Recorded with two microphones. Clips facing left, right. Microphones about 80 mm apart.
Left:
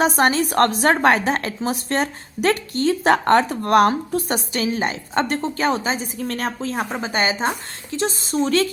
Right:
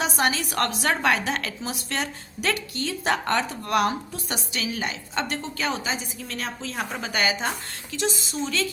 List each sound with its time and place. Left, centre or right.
0.0 s a woman's voice: left
6.9 s a woman's voice: left